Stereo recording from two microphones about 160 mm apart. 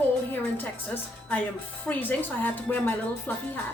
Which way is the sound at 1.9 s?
10° left (ahead or behind).